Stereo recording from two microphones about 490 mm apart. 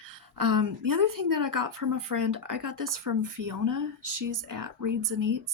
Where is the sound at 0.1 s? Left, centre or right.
Right.